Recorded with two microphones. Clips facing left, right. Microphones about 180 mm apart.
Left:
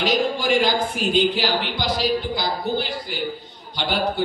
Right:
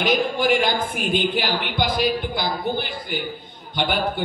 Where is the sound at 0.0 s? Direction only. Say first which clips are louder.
Right 1 dB; 55° right (ahead or behind).